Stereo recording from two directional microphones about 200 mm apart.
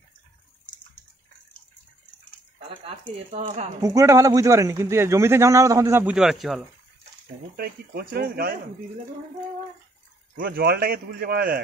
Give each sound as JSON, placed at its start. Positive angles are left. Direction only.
{"t": 3.3, "sound": "speech", "side_deg": -30}
{"t": 3.8, "sound": "speech", "side_deg": -15}
{"t": 7.5, "sound": "a man's voice", "side_deg": -50}
{"t": 10.3, "sound": "a man's voice", "side_deg": -50}